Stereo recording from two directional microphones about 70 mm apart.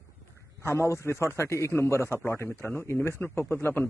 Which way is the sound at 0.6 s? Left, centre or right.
Left.